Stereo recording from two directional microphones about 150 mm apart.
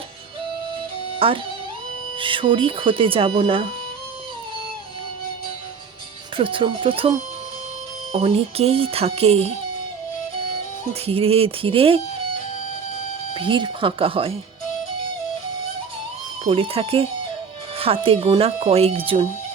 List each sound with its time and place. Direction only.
1.2 s speech: 40° right (ahead or behind)
6.3 s speech: 35° right (ahead or behind)
11.0 s speech: 40° right (ahead or behind)
13.3 s speech: 35° right (ahead or behind)
16.5 s speech: 35° right (ahead or behind)